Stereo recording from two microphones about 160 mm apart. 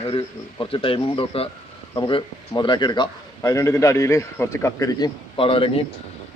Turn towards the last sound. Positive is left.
turn(degrees=35)  # may be behind; listen again after turning